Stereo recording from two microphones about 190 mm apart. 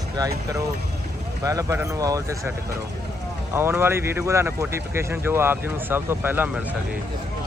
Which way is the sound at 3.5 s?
10° right (ahead or behind).